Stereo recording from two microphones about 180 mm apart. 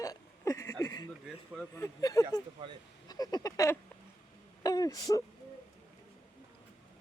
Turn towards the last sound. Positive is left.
turn(degrees=20)  # may be behind; listen again after turning